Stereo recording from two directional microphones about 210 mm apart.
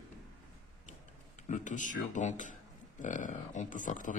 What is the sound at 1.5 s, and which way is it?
A man's voice, 35° left (ahead or behind).